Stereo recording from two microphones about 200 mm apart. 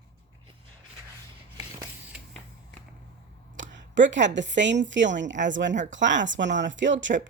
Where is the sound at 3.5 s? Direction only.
65° right (ahead or behind).